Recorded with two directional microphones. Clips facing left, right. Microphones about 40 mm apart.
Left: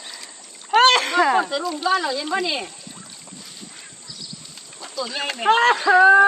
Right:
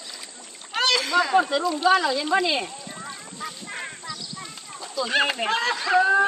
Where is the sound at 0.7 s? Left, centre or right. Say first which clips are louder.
Left 6 dB; left.